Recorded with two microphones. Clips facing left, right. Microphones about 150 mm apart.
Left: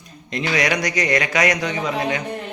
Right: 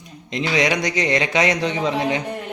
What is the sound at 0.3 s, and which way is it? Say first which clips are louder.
A man's voice: right 1 dB; 20° right (ahead or behind).